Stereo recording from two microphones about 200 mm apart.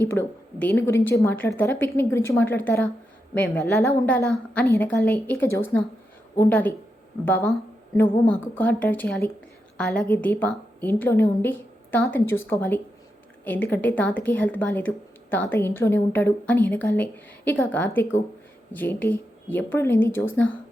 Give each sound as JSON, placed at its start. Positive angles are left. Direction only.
{"t": 0.0, "sound": "speech", "side_deg": 10}